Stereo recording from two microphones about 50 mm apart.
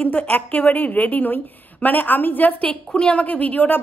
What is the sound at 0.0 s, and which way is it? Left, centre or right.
A woman's voice, left.